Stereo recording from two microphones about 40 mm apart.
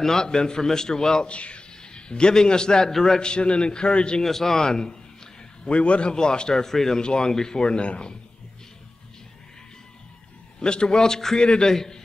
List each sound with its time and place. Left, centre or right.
0.0 s a man's voice: centre
1.2 s a man's voice: left
2.9 s a man's voice: centre
3.2 s speech: left
4.2 s a man's voice: centre
5.6 s a man's voice: left; by 7.0 s centre
7.0 s speech: centre
10.6 s a man's voice: left